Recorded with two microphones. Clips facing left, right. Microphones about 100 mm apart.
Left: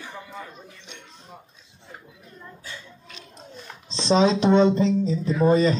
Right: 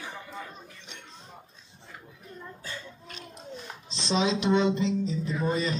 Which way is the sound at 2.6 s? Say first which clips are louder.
Right 1 dB; 45° right (ahead or behind).